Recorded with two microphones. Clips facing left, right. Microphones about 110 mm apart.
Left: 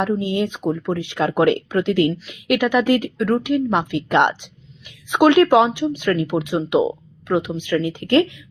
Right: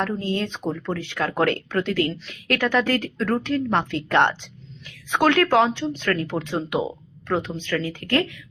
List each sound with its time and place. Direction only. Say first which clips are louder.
0.0 s speech: left 5 dB; 15° left (ahead or behind)
3.2 s speech: left 4 dB; centre (ahead or behind)
3.4 s speech: left 3 dB; 15° left (ahead or behind)